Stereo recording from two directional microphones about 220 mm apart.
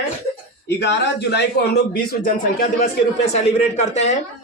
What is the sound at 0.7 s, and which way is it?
A man's voice, 50° left (ahead or behind).